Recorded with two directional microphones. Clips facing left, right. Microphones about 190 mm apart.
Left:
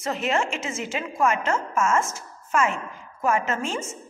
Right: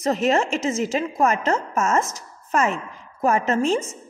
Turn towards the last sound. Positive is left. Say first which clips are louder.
# right 7 dB
turn(degrees=-35)  # may be behind; listen again after turning